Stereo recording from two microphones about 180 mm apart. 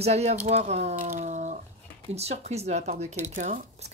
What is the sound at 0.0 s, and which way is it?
Speech, 35° right (ahead or behind).